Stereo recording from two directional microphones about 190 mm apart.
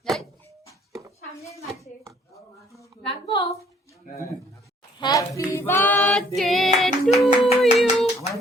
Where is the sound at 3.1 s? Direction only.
20° left (ahead or behind).